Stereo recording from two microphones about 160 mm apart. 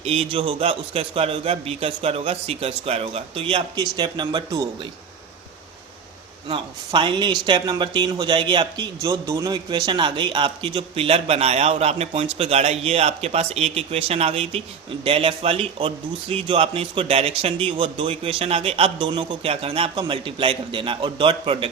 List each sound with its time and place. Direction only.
0.0 s speech: 35° right (ahead or behind)
6.5 s speech: 30° right (ahead or behind)